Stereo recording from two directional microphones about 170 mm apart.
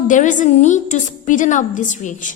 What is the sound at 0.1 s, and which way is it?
A woman's voice, 50° left (ahead or behind).